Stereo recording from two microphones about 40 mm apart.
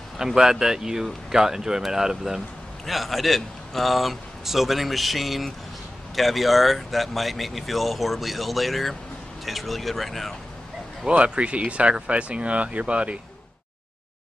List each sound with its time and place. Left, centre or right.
0.2 s speech: centre
2.9 s a man's voice: centre
11.1 s speech: right